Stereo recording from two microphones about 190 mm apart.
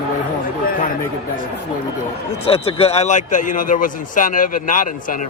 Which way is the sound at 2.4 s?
30° left (ahead or behind).